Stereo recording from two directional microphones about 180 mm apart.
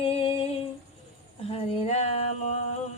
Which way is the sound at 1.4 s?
30° left (ahead or behind).